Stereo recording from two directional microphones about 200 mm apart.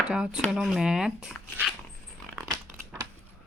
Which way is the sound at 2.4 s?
Centre (ahead or behind).